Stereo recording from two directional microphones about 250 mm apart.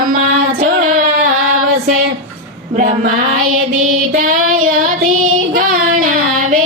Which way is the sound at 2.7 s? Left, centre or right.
Right.